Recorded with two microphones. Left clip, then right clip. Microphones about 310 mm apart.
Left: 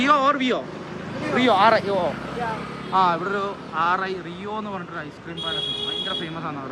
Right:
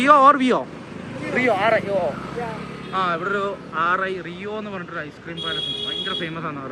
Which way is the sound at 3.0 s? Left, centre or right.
Centre.